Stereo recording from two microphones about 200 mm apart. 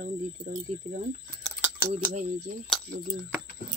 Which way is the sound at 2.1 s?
35° right (ahead or behind).